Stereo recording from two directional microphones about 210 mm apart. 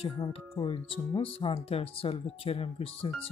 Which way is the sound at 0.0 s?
25° left (ahead or behind).